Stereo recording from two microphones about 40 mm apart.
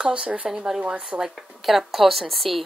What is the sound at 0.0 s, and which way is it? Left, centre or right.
Speech, right.